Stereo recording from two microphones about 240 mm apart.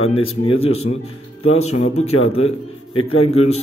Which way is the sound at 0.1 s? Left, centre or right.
Left.